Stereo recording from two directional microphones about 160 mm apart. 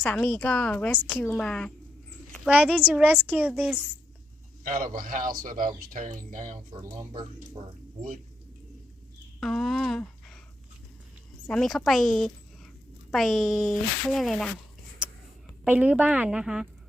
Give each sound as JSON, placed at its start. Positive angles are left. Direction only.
{"t": 0.0, "sound": "a woman's voice", "side_deg": 10}
{"t": 2.5, "sound": "a child's voice", "side_deg": -10}
{"t": 4.6, "sound": "speech", "side_deg": -55}
{"t": 6.7, "sound": "speech", "side_deg": -20}
{"t": 9.4, "sound": "speech", "side_deg": 0}
{"t": 11.4, "sound": "speech", "side_deg": 5}
{"t": 15.6, "sound": "a child's voice", "side_deg": -10}